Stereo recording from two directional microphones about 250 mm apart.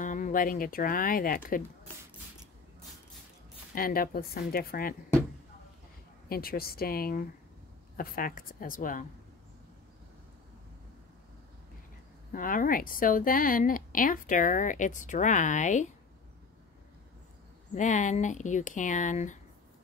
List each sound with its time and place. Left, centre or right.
0.0 s speech: left
3.7 s a woman's voice: left
6.2 s a woman's voice: left
12.3 s a woman's voice: left
17.7 s speech: left